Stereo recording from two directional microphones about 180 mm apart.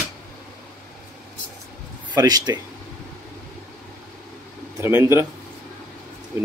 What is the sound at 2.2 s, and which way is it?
Speech, 20° right (ahead or behind).